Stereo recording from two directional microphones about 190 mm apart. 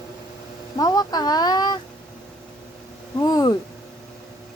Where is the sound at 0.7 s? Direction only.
20° left (ahead or behind).